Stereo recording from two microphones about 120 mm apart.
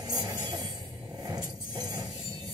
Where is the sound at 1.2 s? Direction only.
35° right (ahead or behind).